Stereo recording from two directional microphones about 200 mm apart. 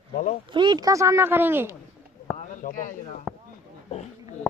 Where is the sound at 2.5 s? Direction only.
40° left (ahead or behind).